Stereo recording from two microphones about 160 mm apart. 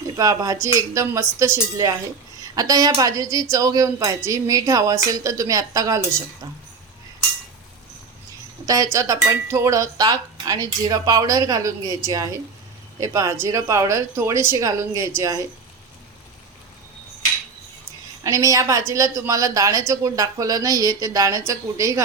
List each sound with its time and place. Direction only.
0.2 s speech: 20° right (ahead or behind)
8.6 s speech: 20° right (ahead or behind)
18.2 s speech: 20° right (ahead or behind)